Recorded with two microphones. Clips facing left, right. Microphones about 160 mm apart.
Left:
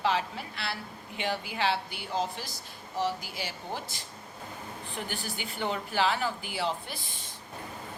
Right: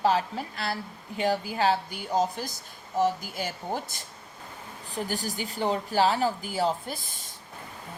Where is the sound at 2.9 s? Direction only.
45° right (ahead or behind).